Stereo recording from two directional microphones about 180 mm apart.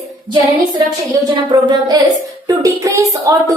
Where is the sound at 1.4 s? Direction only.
25° right (ahead or behind).